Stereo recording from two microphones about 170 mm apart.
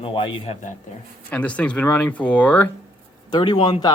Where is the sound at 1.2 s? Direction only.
10° left (ahead or behind).